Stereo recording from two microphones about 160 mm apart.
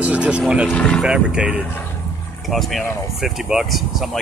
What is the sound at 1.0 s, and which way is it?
Speech, 5° right (ahead or behind).